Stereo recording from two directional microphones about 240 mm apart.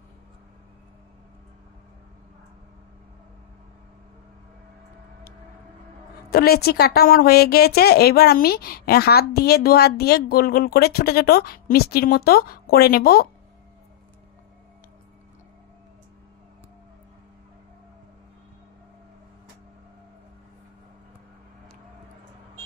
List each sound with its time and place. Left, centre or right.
6.3 s a woman's voice: left